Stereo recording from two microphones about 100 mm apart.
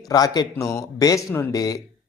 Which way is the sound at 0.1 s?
40° left (ahead or behind).